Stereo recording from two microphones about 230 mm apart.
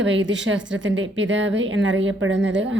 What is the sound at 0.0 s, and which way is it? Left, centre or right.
Speech, right.